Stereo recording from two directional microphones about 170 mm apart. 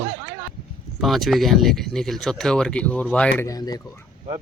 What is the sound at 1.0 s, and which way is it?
Speech, centre (ahead or behind).